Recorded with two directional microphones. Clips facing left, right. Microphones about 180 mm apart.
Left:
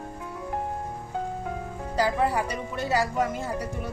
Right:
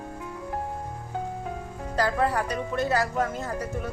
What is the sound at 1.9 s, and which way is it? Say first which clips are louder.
A woman's voice: even; 10° left (ahead or behind).